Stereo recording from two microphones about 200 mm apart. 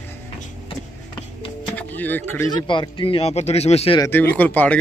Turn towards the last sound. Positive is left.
turn(degrees=10)  # may be behind; listen again after turning